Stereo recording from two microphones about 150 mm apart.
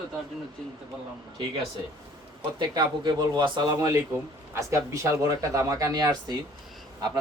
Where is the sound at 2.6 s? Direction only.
30° right (ahead or behind).